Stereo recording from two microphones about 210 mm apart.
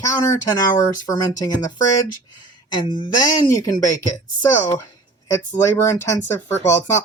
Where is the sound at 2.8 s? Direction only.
20° left (ahead or behind).